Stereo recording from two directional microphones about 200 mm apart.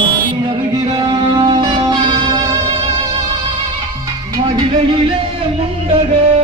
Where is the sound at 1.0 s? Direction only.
20° right (ahead or behind).